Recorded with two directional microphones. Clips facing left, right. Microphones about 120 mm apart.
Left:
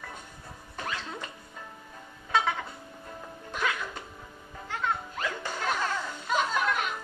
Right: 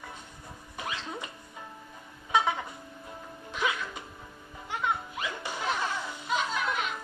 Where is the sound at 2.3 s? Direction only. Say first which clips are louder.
Right 1 dB; 15° right (ahead or behind).